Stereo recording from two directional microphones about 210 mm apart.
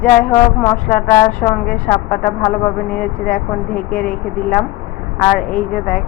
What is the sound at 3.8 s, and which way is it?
A woman's voice, 5° left (ahead or behind).